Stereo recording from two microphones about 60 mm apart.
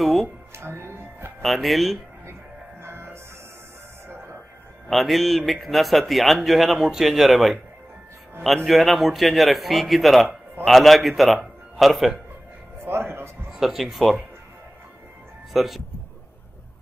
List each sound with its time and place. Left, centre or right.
0.0 s music: centre
0.6 s music: right
1.4 s a man's voice: centre
2.8 s music: right
4.8 s a man's voice: centre
8.6 s a man's voice: centre
12.7 s speech: right
13.5 s a man's voice: centre
15.5 s speech: centre